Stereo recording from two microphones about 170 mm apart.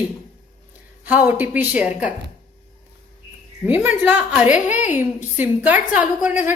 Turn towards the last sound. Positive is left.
turn(degrees=-10)  # may be behind; listen again after turning